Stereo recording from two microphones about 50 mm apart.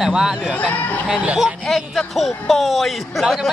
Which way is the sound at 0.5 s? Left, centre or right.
Left.